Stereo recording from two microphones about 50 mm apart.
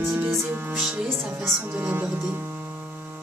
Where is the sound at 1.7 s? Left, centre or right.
Right.